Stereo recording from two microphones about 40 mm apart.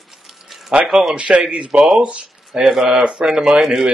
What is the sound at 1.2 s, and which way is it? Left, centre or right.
Speech, right.